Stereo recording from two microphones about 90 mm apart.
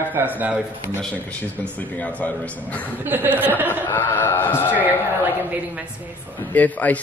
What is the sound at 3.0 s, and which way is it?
Speech, 20° right (ahead or behind).